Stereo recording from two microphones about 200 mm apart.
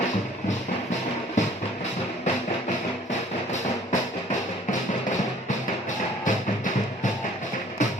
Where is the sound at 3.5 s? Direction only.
35° left (ahead or behind).